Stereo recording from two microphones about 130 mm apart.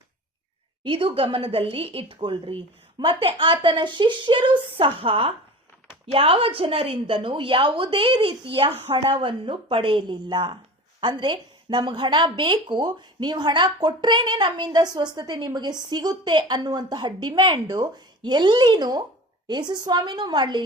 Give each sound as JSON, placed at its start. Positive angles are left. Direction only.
{"t": 0.9, "sound": "a woman's voice", "side_deg": -45}